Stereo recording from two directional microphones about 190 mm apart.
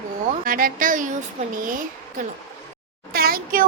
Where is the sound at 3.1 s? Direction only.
50° right (ahead or behind).